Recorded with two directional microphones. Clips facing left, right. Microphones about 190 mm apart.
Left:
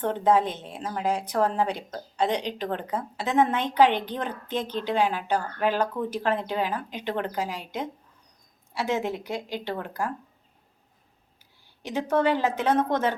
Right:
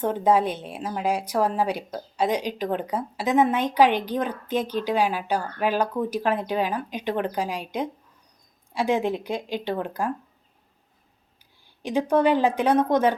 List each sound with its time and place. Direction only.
0.0 s a woman's voice: 10° right (ahead or behind)
11.8 s a woman's voice: 15° right (ahead or behind)